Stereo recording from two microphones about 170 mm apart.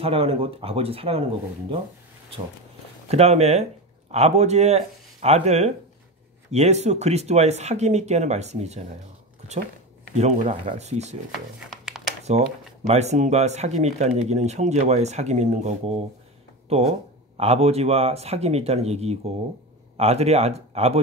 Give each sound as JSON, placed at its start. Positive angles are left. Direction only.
{"t": 0.0, "sound": "speech", "side_deg": -35}
{"t": 3.1, "sound": "speech", "side_deg": -40}
{"t": 10.1, "sound": "speech", "side_deg": -45}
{"t": 11.7, "sound": "a sound", "side_deg": 0}
{"t": 12.3, "sound": "speech", "side_deg": -40}